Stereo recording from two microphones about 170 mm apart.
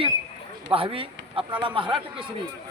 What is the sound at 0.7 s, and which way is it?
Speech, 30° right (ahead or behind).